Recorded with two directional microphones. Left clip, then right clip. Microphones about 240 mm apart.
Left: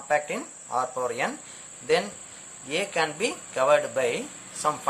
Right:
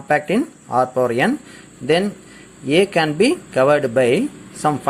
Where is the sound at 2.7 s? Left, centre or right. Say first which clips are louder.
Right 10 dB; centre.